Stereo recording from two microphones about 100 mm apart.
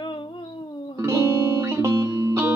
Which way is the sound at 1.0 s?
30° right (ahead or behind).